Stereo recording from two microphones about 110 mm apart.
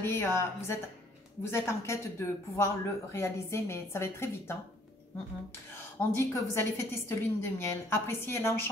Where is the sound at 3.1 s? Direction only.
25° left (ahead or behind).